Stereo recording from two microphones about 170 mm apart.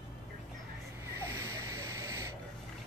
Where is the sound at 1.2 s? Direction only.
20° right (ahead or behind).